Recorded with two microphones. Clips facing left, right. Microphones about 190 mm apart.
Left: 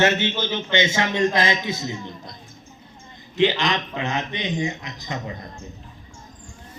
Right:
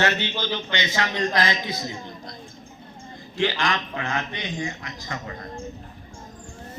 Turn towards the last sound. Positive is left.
turn(degrees=20)  # may be behind; listen again after turning